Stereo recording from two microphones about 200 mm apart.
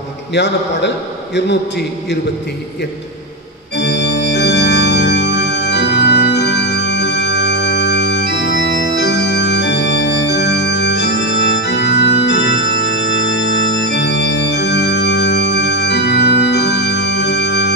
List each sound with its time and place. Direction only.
0.3 s a man's voice: 60° left (ahead or behind)
3.7 s organ: 60° left (ahead or behind)